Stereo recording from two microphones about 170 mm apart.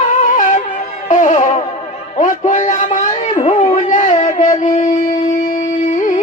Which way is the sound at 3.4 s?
35° left (ahead or behind).